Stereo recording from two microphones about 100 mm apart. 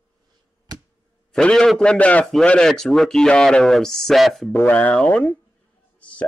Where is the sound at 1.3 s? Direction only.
5° left (ahead or behind).